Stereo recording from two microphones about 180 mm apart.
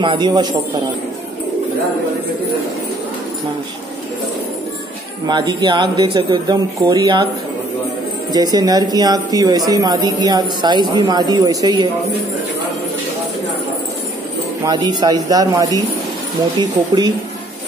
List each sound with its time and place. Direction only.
0.0 s speech: 25° right (ahead or behind)
5.2 s speech: 20° right (ahead or behind)
8.3 s speech: 20° right (ahead or behind)
14.6 s speech: 20° right (ahead or behind)